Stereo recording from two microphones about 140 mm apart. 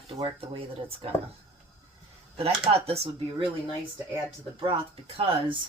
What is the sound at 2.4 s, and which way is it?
Speech, 45° right (ahead or behind).